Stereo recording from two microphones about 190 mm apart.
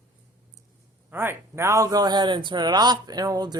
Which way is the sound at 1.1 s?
10° right (ahead or behind).